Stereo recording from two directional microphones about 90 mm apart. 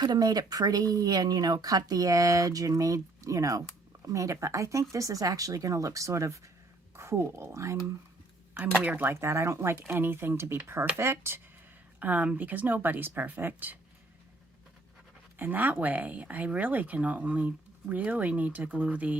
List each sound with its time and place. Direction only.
0.0 s speech: 50° right (ahead or behind); by 7.8 s 35° right (ahead or behind)
8.8 s speech: 15° right (ahead or behind)
9.0 s speech: 30° right (ahead or behind)
11.9 s speech: 15° right (ahead or behind)
15.4 s speech: 20° right (ahead or behind)